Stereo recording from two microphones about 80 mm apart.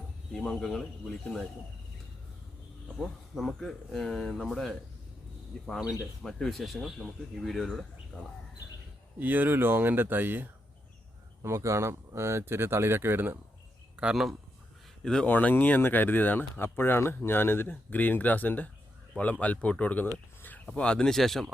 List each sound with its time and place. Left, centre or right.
0.3 s speech: centre
3.0 s speech: centre
6.2 s speech: centre
9.1 s speech: right
11.4 s speech: right
14.0 s speech: centre
15.0 s speech: centre